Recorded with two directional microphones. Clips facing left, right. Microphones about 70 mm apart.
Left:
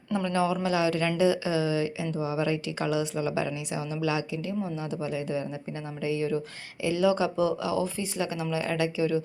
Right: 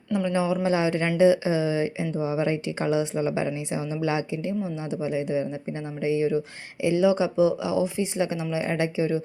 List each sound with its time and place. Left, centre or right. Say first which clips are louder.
0.1 s speech: right 2 dB; centre